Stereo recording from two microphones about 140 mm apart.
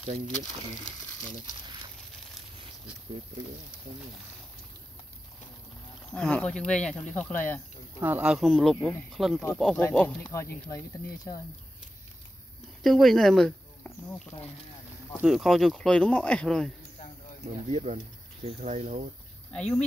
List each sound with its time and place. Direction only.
6.1 s speech: 10° left (ahead or behind)
8.0 s speech: 10° right (ahead or behind)
8.5 s speech: 5° left (ahead or behind)
9.8 s speech: 15° left (ahead or behind)
12.8 s speech: centre (ahead or behind)
15.2 s speech: centre (ahead or behind)
17.6 s speech: 45° right (ahead or behind)
19.5 s speech: 5° left (ahead or behind)